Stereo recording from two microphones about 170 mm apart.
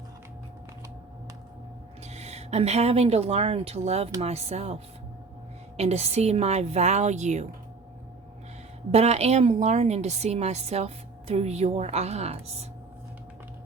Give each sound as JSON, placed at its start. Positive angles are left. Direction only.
{"t": 2.0, "sound": "a woman's voice", "side_deg": -40}
{"t": 8.9, "sound": "a woman's voice", "side_deg": -40}